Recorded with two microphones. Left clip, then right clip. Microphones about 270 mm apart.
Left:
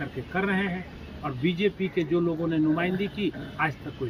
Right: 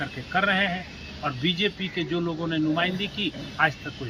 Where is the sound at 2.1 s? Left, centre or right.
Centre.